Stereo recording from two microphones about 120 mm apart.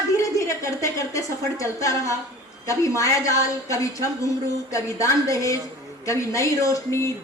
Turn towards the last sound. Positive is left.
turn(degrees=25)  # may be behind; listen again after turning